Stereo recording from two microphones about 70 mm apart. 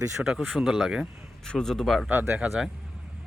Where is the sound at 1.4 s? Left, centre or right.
Centre.